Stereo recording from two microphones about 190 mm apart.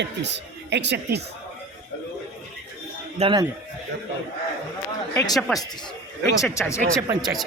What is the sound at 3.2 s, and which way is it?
Speech, 25° right (ahead or behind).